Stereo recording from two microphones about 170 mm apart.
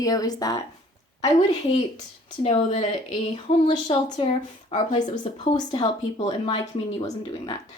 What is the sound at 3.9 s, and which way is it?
A woman's voice, 25° left (ahead or behind).